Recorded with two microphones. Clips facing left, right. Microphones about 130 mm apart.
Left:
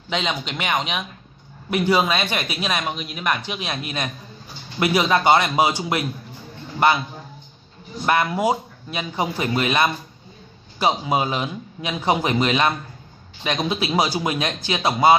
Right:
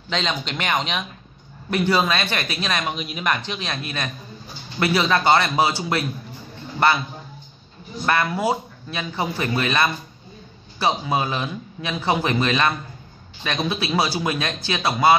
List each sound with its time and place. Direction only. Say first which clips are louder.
0.1 s a man's voice: even; 10° left (ahead or behind)
2.8 s speech: even; centre (ahead or behind)
3.3 s a man's voice: even; 10° left (ahead or behind)
8.0 s a man's voice: left 2 dB; 20° left (ahead or behind)